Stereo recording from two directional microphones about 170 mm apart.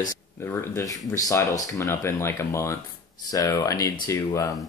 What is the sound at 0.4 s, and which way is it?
Speech, 15° left (ahead or behind).